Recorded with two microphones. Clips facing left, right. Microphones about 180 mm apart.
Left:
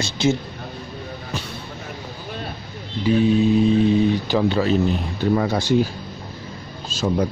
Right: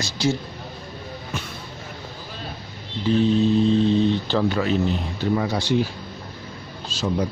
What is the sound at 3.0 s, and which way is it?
Speech, 10° left (ahead or behind).